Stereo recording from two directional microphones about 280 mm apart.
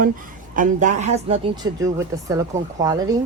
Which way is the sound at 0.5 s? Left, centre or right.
Right.